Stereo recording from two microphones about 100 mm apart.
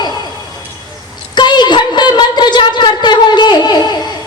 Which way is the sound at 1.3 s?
50° left (ahead or behind).